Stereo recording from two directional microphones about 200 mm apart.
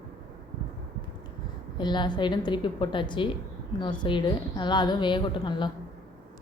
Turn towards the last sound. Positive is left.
turn(degrees=25)  # may be behind; listen again after turning